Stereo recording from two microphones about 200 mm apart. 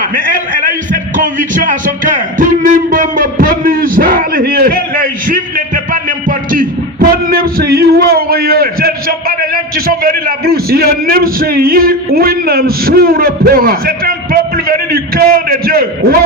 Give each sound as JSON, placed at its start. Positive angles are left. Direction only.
{"t": 1.1, "sound": "a man's voice", "side_deg": -40}